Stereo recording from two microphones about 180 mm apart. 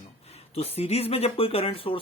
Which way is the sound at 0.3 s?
35° left (ahead or behind).